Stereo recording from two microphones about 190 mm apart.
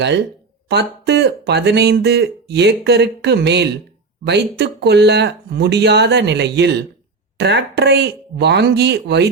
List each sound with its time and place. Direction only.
0.7 s speech: 60° right (ahead or behind)